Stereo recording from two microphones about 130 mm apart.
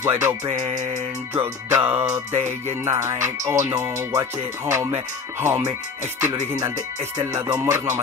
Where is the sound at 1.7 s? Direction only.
20° right (ahead or behind).